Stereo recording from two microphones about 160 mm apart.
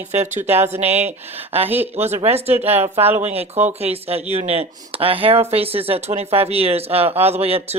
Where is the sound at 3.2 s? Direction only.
45° right (ahead or behind).